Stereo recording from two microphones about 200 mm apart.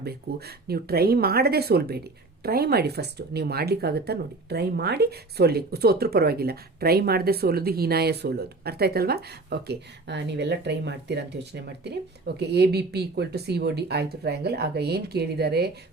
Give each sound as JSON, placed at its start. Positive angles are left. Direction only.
{"t": 0.0, "sound": "speech", "side_deg": -50}